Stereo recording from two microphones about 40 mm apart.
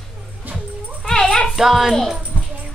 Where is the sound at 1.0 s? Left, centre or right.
Left.